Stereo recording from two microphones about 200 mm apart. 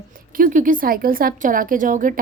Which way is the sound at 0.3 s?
40° right (ahead or behind).